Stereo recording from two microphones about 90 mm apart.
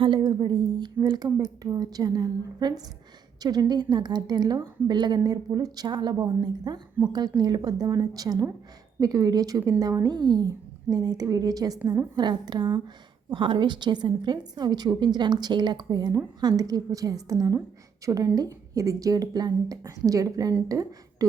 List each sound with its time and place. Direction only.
0.0 s a woman's voice: 60° right (ahead or behind)
13.3 s a woman's voice: 65° right (ahead or behind); by 21.2 s 40° right (ahead or behind)